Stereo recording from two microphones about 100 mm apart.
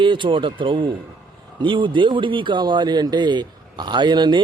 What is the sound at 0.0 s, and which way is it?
Speech, 55° right (ahead or behind).